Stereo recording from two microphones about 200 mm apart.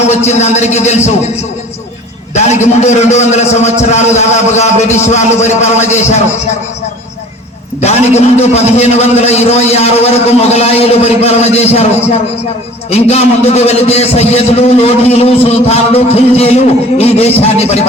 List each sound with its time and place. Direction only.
0.1 s a man's voice: 35° left (ahead or behind)
2.3 s a man's voice: 35° left (ahead or behind)
7.8 s a man's voice: 35° left (ahead or behind)